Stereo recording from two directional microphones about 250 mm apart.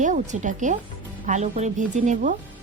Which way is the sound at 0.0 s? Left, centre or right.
Right.